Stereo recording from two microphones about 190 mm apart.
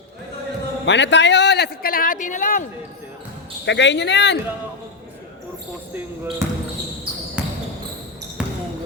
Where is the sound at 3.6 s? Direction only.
70° left (ahead or behind).